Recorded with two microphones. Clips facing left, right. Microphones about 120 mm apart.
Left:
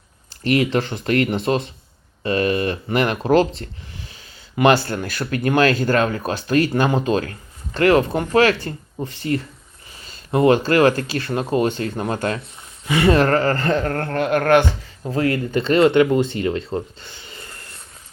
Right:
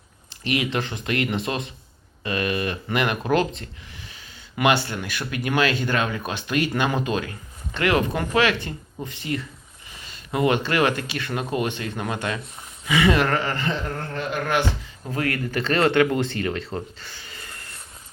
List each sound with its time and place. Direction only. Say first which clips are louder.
0.4 s speech: left 6 dB; 40° left (ahead or behind); by 14.6 s 55° left (ahead or behind)
15.0 s speech: left 6 dB; 30° left (ahead or behind)
16.7 s a sound: left 5 dB; 25° left (ahead or behind)